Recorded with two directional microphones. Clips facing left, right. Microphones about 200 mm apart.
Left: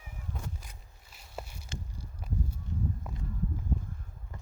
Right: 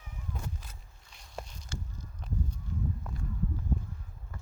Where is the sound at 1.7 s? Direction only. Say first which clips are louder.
Right 1 dB; 10° left (ahead or behind).